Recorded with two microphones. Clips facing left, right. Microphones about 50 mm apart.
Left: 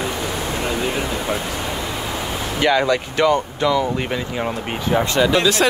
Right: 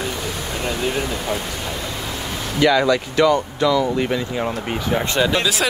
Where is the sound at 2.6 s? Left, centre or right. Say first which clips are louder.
Right 1 dB; left.